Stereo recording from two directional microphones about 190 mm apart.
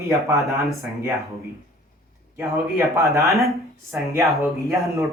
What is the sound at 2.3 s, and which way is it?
Speech, 15° right (ahead or behind).